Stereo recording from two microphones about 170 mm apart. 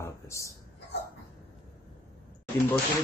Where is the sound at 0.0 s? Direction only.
15° left (ahead or behind).